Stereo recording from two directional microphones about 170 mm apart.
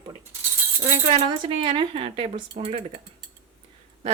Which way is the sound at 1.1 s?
30° right (ahead or behind).